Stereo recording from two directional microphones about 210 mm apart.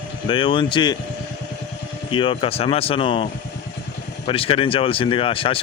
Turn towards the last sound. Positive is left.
turn(degrees=25)  # may be behind; listen again after turning